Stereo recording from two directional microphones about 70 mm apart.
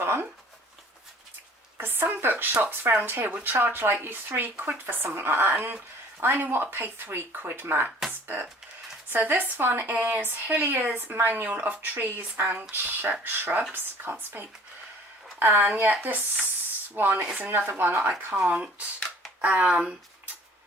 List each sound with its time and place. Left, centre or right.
0.0 s a sound: right
1.8 s a woman's voice: right
7.9 s music: centre
9.0 s a woman's voice: right
18.4 s speech: centre